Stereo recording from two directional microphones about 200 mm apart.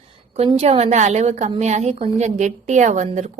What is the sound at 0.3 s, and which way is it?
A woman's voice, 30° right (ahead or behind).